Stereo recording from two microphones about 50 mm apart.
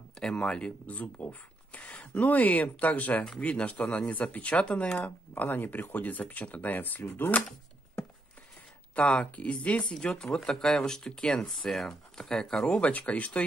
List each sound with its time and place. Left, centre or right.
0.4 s speech: left
5.3 s speech: left
7.0 s speech: left
8.9 s speech: left
9.9 s speech: centre
12.6 s speech: left